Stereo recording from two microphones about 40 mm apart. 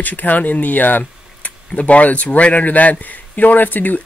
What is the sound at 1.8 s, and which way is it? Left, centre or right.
Speech, left.